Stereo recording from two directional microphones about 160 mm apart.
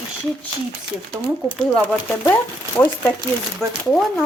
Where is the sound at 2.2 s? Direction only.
10° left (ahead or behind).